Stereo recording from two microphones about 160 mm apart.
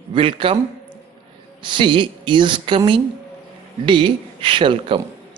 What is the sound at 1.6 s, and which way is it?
Speech, 30° right (ahead or behind).